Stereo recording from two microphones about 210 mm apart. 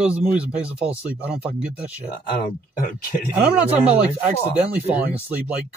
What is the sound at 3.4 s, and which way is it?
Speech, 5° right (ahead or behind).